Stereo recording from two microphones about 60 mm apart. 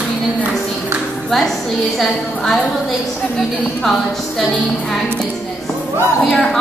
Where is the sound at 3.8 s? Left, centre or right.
Centre.